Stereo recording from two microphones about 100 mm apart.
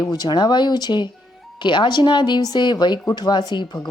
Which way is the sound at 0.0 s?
40° left (ahead or behind).